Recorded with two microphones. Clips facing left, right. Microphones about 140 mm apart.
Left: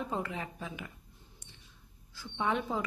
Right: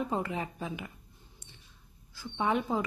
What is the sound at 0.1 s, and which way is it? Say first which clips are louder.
Speech: right 3 dB; 15° right (ahead or behind).